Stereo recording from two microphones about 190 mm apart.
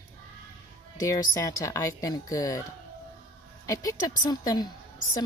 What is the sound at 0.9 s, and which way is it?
Speech, 15° left (ahead or behind).